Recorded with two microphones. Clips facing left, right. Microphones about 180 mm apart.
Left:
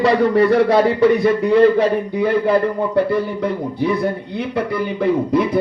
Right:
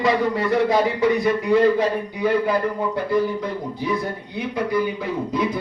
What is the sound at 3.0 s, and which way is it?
Speech, 60° left (ahead or behind).